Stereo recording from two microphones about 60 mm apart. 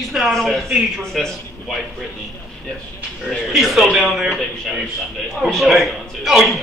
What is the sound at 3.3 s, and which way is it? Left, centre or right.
Speech, centre.